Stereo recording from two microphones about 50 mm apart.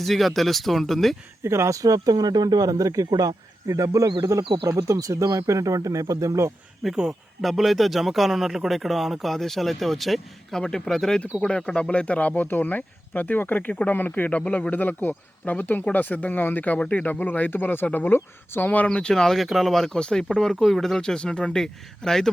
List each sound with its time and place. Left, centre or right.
0.0 s a man's voice: centre
1.5 s speech: right
3.7 s speech: right
6.8 s speech: centre
7.4 s a man's voice: centre; by 18.7 s left
18.9 s speech: centre
19.2 s a man's voice: centre
20.0 s a man's voice: centre
21.0 s speech: centre